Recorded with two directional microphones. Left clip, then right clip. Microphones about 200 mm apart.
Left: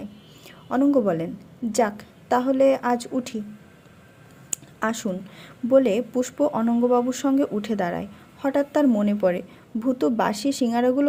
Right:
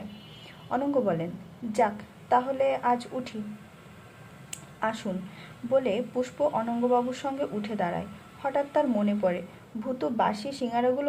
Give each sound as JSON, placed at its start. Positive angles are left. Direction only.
{"t": 0.7, "sound": "a woman's voice", "side_deg": 35}
{"t": 4.5, "sound": "a woman's voice", "side_deg": 40}